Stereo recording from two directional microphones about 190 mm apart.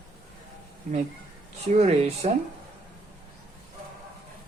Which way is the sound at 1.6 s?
35° right (ahead or behind).